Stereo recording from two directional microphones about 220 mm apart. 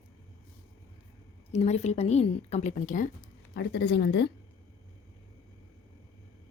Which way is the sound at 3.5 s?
50° left (ahead or behind).